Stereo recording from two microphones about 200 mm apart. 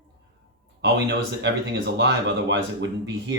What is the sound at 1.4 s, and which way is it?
Speech, 65° right (ahead or behind).